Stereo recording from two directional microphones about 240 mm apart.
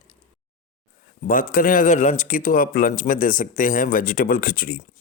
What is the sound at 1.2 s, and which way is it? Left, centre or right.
Speech, left.